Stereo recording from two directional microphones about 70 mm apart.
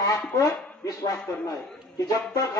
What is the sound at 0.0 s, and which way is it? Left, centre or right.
Speech, left.